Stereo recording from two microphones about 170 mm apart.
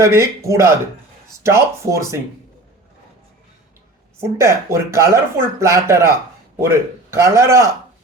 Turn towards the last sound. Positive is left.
turn(degrees=-15)  # may be behind; listen again after turning